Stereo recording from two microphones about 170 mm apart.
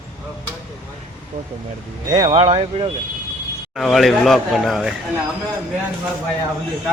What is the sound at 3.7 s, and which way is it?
Speech, centre (ahead or behind).